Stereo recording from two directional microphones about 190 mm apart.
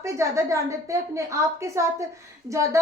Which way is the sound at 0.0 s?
15° right (ahead or behind).